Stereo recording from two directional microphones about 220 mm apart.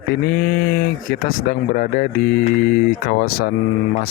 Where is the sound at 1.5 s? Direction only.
35° left (ahead or behind).